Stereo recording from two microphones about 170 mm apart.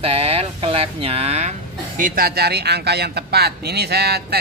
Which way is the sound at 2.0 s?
60° right (ahead or behind).